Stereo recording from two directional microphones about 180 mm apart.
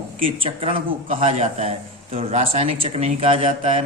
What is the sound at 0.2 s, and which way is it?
Speech, 30° right (ahead or behind).